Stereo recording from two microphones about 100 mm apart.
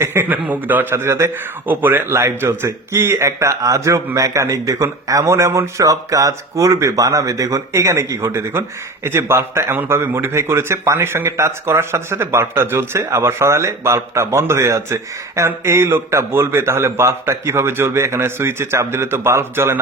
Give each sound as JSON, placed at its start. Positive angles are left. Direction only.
{"t": 0.0, "sound": "a man's voice", "side_deg": -25}